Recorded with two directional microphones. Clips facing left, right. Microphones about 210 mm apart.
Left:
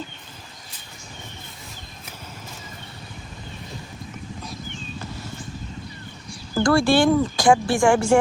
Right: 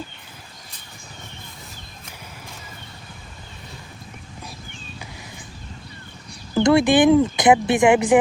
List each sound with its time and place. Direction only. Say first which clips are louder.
6.6 s speech: right 3 dB; 20° right (ahead or behind)